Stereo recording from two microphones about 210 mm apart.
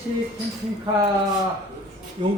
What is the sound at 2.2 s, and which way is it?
Speech, 30° right (ahead or behind).